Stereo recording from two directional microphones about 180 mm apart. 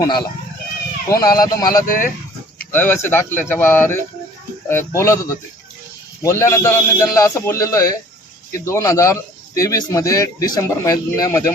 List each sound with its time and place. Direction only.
0.0 s speech: 25° left (ahead or behind)
1.9 s speech: 50° left (ahead or behind)
2.7 s speech: 10° left (ahead or behind)